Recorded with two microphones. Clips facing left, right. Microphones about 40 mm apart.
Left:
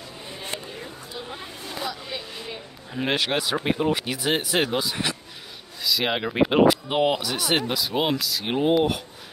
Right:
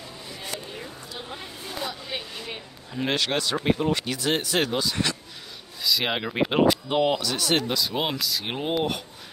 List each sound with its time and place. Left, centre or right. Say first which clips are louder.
0.3 s a sound: left 2 dB; left
2.9 s speech: left 1 dB; centre
5.8 s speech: left 1 dB; centre
6.9 s speech: left 1 dB; centre